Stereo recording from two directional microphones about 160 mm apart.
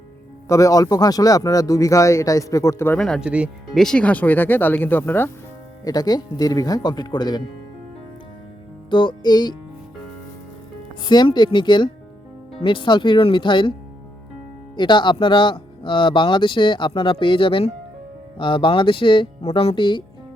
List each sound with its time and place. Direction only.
0.4 s speech: 20° left (ahead or behind)
3.0 s speech: centre (ahead or behind)
3.8 s speech: 5° left (ahead or behind)
5.8 s speech: 25° left (ahead or behind)
8.9 s speech: 30° left (ahead or behind)
11.0 s speech: 30° left (ahead or behind)
14.8 s speech: 30° left (ahead or behind)